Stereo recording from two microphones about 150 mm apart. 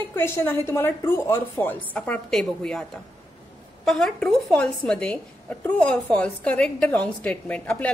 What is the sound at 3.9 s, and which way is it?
A woman's voice, 5° left (ahead or behind).